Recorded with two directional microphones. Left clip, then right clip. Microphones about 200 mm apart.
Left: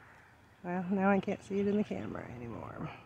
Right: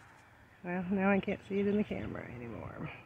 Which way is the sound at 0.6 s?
5° left (ahead or behind).